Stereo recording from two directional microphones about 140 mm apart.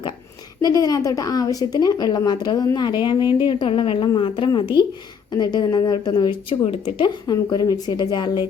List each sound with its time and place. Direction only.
0.6 s a woman's voice: 25° left (ahead or behind)